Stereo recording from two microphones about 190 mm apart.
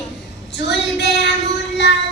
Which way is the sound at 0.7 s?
65° left (ahead or behind).